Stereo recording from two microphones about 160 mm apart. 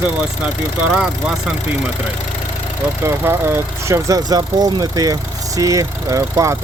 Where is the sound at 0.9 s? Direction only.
5° right (ahead or behind).